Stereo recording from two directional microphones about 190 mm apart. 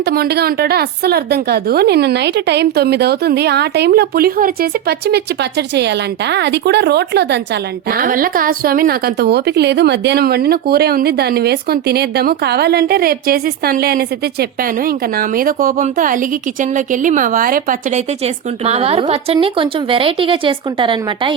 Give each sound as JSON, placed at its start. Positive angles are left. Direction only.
{"t": 0.0, "sound": "a woman's voice", "side_deg": -55}